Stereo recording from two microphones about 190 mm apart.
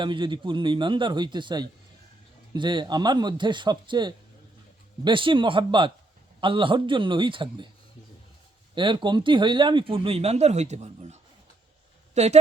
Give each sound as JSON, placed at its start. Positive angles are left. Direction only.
{"t": 0.0, "sound": "speech", "side_deg": -25}
{"t": 8.7, "sound": "a woman's voice", "side_deg": -25}